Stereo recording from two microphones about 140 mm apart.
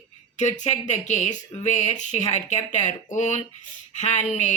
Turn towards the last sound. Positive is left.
turn(degrees=55)  # may be behind; listen again after turning